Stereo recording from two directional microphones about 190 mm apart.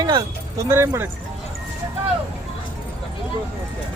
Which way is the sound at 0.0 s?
20° right (ahead or behind).